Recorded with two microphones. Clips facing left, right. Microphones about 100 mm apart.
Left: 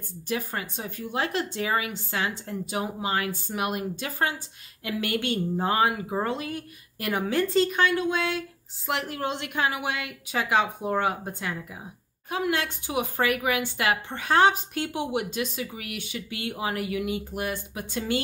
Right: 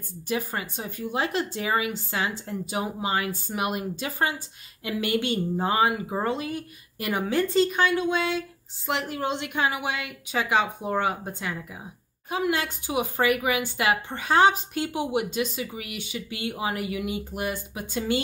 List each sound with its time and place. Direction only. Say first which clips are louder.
0.3 s speech: right 1 dB; 5° right (ahead or behind)